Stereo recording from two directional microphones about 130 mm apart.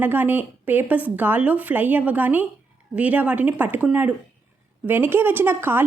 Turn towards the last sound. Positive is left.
turn(degrees=-15)  # may be behind; listen again after turning